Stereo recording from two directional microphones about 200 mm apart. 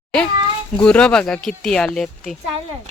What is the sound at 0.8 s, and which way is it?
Speech, 5° left (ahead or behind).